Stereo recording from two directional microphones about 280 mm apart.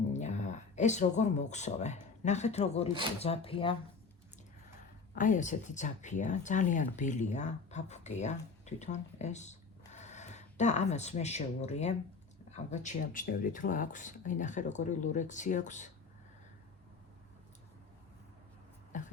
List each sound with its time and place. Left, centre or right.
0.1 s speech: left
5.1 s speech: left
18.9 s a sound: left